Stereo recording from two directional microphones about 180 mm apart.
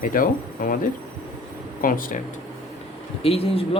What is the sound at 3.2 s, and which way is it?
Speech, 30° left (ahead or behind).